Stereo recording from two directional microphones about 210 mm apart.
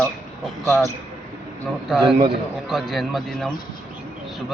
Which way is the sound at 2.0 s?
30° right (ahead or behind).